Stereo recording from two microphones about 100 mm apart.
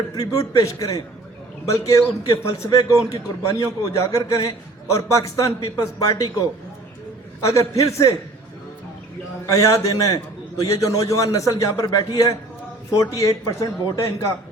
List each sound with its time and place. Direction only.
0.2 s a man's voice: 35° left (ahead or behind)
7.4 s a man's voice: 30° left (ahead or behind)
9.5 s a man's voice: 30° left (ahead or behind)